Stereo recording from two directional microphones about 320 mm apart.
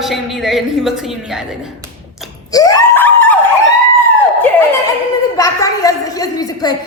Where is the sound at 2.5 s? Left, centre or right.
Centre.